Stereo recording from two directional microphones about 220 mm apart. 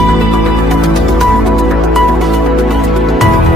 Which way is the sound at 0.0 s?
Centre (ahead or behind).